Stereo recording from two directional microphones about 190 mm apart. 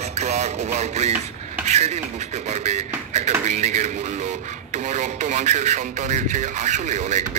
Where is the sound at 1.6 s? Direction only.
35° right (ahead or behind).